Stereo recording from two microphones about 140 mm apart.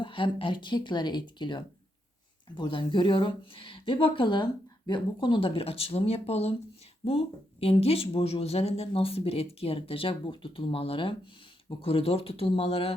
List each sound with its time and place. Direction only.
0.0 s speech: 35° left (ahead or behind)